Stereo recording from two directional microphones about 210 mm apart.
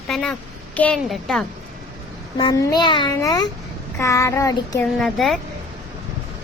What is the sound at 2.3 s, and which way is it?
A child's voice, 20° left (ahead or behind).